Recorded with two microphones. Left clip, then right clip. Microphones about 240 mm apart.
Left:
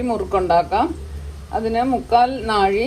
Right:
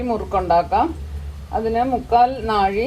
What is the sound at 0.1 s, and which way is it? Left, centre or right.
A woman's voice, left.